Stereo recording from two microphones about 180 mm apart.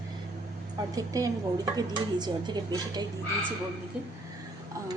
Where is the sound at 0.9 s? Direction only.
20° right (ahead or behind).